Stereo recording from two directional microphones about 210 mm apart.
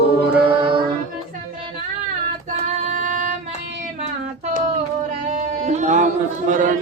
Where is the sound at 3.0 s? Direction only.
35° right (ahead or behind).